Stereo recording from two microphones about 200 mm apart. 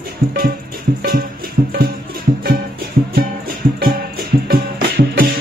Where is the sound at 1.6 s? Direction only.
40° right (ahead or behind).